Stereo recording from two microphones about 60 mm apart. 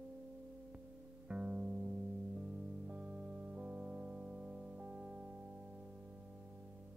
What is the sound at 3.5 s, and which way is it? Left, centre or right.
Music, right.